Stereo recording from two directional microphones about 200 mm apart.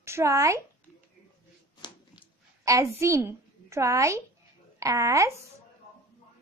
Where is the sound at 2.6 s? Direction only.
15° right (ahead or behind).